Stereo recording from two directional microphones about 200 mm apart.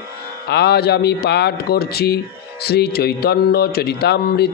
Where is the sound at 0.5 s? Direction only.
55° left (ahead or behind).